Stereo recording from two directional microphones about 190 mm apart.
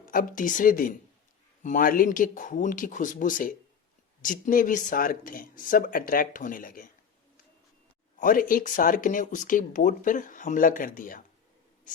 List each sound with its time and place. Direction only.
0.0 s speech: 45° left (ahead or behind)
8.2 s speech: 45° left (ahead or behind)